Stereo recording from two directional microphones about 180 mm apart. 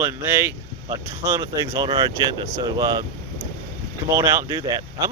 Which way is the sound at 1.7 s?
20° right (ahead or behind).